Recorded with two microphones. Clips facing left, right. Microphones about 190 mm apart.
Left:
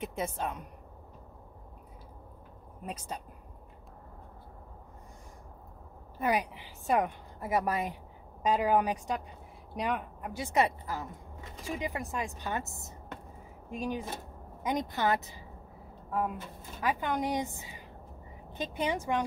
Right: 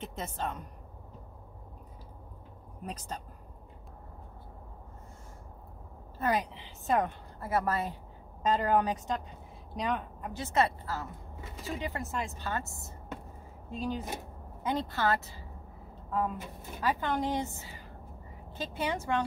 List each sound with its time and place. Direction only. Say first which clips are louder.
0.0 s speech: left 2 dB; 10° left (ahead or behind)
2.8 s speech: even; 10° left (ahead or behind)
6.1 s a woman's voice: even; 10° left (ahead or behind)